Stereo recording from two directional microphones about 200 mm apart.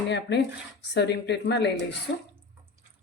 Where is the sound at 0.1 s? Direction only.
60° left (ahead or behind).